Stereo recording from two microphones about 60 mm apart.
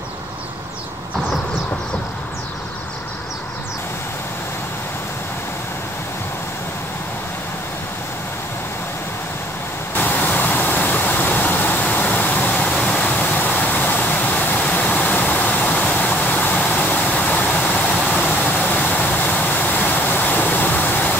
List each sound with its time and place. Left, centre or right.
9.9 s vehicle: left
18.5 s vehicle: left